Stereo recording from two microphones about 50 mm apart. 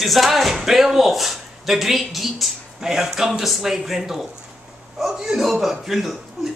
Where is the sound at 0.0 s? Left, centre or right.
Centre.